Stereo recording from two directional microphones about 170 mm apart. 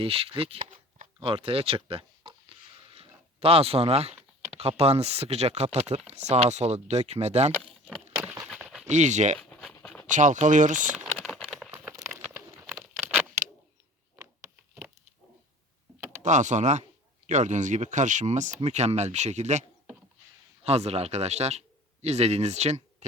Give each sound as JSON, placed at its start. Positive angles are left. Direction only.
{"t": 0.0, "sound": "speech", "side_deg": -35}
{"t": 1.2, "sound": "a sound", "side_deg": -35}
{"t": 4.5, "sound": "speech", "side_deg": -40}
{"t": 7.5, "sound": "a sound", "side_deg": 5}
{"t": 8.9, "sound": "speech", "side_deg": -45}
{"t": 9.4, "sound": "a sound", "side_deg": 5}
{"t": 10.1, "sound": "speech", "side_deg": -45}
{"t": 10.9, "sound": "typing", "side_deg": 5}
{"t": 11.7, "sound": "crumpling", "side_deg": -20}
{"t": 12.6, "sound": "patter", "side_deg": 0}
{"t": 14.2, "sound": "a sound", "side_deg": -15}
{"t": 16.2, "sound": "speech", "side_deg": -45}
{"t": 20.7, "sound": "speech", "side_deg": -40}